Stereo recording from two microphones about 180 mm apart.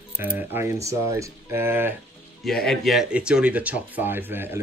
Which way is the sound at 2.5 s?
Centre (ahead or behind).